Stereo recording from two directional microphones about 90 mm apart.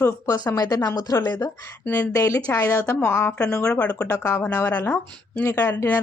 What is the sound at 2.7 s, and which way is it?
Speech, 20° left (ahead or behind).